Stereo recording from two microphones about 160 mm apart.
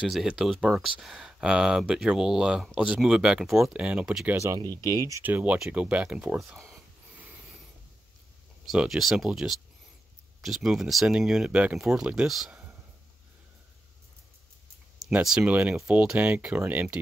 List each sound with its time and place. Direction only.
0.1 s speech: 5° right (ahead or behind)
4.4 s speech: 20° right (ahead or behind)
8.6 s speech: centre (ahead or behind)
15.0 s speech: 5° right (ahead or behind)